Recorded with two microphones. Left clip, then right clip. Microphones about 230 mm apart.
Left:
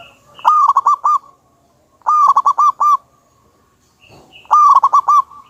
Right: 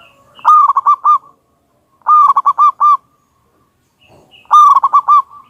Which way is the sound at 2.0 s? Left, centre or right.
Centre.